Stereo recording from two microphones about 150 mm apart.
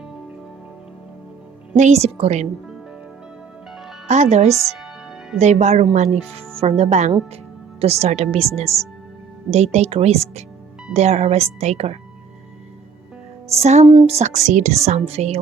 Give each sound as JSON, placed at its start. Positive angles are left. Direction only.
{"t": 1.7, "sound": "speech", "side_deg": -50}
{"t": 4.1, "sound": "speech", "side_deg": -50}
{"t": 13.6, "sound": "speech", "side_deg": -45}